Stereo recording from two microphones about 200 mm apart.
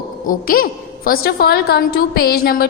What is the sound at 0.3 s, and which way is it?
A woman's voice, 45° left (ahead or behind).